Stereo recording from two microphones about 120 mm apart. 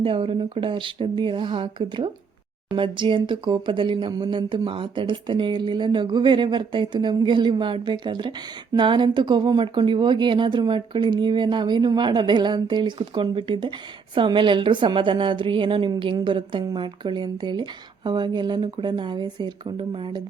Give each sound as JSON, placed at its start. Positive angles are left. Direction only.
{"t": 0.0, "sound": "speech", "side_deg": -45}